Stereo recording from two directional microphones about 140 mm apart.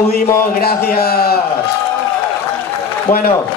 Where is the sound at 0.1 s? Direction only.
90° left.